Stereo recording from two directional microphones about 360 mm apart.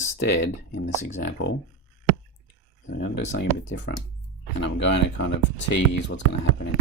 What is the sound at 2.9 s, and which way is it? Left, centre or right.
Speech, left.